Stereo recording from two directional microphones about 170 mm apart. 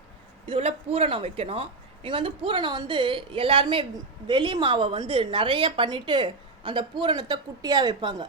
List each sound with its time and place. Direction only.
0.4 s speech: 35° right (ahead or behind)